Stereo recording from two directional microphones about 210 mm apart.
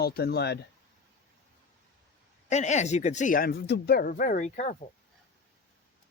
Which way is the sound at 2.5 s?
35° left (ahead or behind).